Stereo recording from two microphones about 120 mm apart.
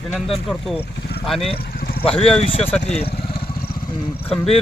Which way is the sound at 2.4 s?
50° left (ahead or behind).